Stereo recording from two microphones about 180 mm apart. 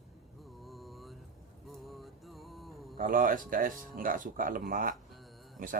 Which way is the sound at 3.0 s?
50° right (ahead or behind).